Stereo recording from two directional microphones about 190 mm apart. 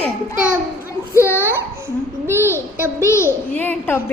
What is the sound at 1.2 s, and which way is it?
Laughter, 10° right (ahead or behind).